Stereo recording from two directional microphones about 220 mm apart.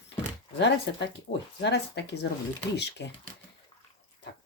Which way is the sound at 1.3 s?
35° left (ahead or behind).